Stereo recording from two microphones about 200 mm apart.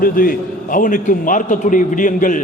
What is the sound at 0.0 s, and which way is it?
A man's voice, 45° left (ahead or behind).